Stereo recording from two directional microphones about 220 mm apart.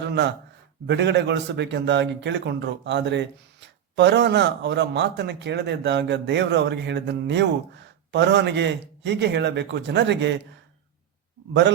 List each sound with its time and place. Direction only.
0.9 s a man's voice: 50° right (ahead or behind)